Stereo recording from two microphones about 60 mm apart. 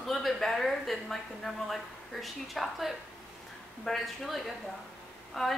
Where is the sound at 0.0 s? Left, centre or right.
Centre.